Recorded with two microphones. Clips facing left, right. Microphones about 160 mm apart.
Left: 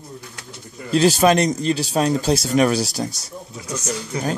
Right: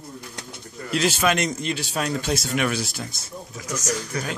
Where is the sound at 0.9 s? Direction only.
35° left (ahead or behind).